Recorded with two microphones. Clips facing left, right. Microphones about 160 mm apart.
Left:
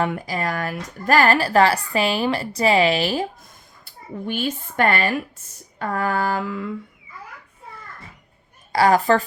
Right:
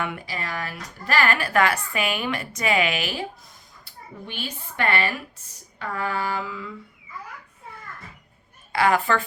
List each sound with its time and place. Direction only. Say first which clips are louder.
0.0 s a woman's voice: left 7 dB; 40° left (ahead or behind)
4.3 s a woman's voice: left 11 dB; 45° left (ahead or behind)
8.7 s a woman's voice: left 5 dB; 35° left (ahead or behind)